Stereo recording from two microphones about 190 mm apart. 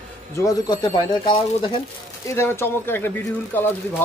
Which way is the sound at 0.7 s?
25° left (ahead or behind).